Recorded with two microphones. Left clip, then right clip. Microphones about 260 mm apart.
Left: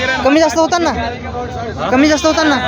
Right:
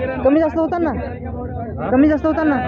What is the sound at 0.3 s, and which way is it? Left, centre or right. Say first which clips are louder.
Speech: left 4 dB; centre.